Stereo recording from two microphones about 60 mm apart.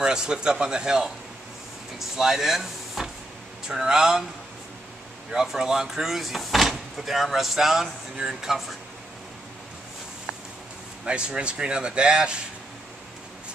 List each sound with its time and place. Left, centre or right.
0.0 s speech: centre
5.3 s speech: centre
11.1 s speech: centre